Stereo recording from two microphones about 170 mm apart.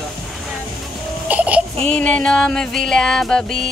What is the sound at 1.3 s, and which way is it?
Baby cry, 10° right (ahead or behind).